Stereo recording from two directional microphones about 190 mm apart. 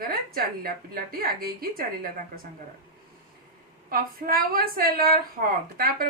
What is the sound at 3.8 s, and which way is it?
A woman's voice, 50° right (ahead or behind).